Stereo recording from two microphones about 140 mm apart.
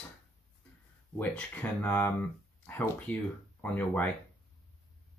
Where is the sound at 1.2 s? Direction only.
10° left (ahead or behind).